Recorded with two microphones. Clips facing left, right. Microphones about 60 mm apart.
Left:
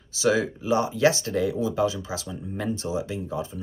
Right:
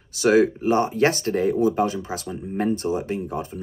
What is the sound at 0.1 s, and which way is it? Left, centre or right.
Speech, right.